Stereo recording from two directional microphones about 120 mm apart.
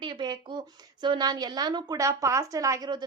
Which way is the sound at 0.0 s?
40° right (ahead or behind).